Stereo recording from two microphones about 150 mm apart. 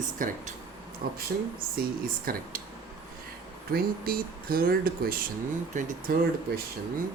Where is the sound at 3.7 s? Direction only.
80° right.